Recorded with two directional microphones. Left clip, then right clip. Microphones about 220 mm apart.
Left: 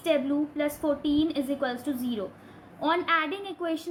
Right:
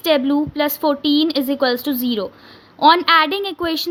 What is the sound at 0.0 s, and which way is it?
A woman's voice, 50° right (ahead or behind).